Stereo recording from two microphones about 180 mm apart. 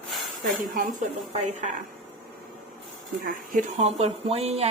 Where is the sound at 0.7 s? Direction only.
50° right (ahead or behind).